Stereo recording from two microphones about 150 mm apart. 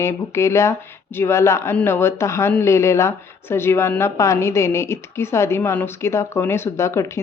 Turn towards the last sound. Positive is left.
turn(degrees=20)  # may be behind; listen again after turning